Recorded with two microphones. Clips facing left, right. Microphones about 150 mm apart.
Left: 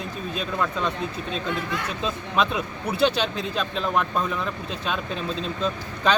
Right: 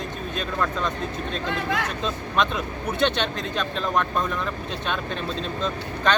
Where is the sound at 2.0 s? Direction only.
5° left (ahead or behind).